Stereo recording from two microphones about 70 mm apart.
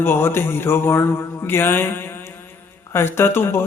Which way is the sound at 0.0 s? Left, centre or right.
Left.